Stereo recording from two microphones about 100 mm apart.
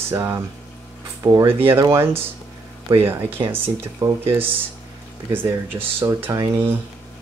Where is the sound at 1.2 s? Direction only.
40° right (ahead or behind).